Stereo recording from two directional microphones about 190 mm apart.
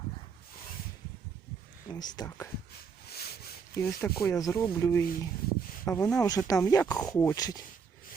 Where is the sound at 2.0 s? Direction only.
15° left (ahead or behind).